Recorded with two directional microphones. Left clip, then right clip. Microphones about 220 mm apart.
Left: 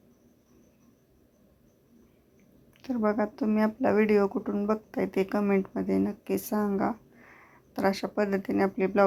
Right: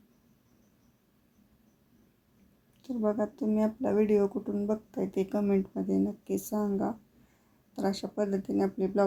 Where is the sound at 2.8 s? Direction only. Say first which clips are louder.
Left 3 dB; 5° left (ahead or behind).